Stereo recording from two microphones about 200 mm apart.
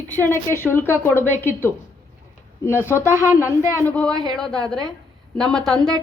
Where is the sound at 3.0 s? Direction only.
10° right (ahead or behind).